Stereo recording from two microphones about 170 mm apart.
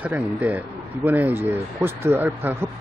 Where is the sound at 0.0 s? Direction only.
10° right (ahead or behind).